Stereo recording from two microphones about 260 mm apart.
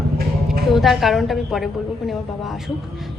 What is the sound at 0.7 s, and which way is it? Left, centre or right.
A woman's voice, centre.